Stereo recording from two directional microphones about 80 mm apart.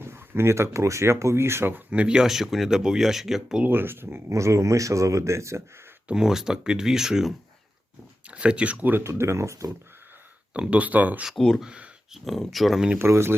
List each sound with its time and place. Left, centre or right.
0.0 s speech: right
1.9 s speech: centre
3.6 s speech: right
6.1 s speech: centre; by 9.6 s right
10.5 s speech: centre
11.3 s speech: centre
11.6 s speech: centre
12.2 s speech: centre
13.0 s speech: right